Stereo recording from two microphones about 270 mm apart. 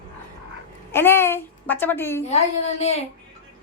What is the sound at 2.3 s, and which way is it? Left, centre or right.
Speech, left.